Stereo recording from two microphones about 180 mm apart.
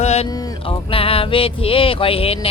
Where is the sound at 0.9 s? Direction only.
30° left (ahead or behind).